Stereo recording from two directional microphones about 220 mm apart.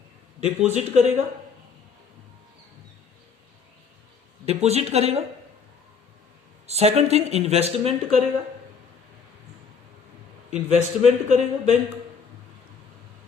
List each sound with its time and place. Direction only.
0.3 s a man's voice: 30° right (ahead or behind)
4.4 s speech: 30° right (ahead or behind)
6.7 s speech: 30° right (ahead or behind)
10.5 s a man's voice: 30° right (ahead or behind)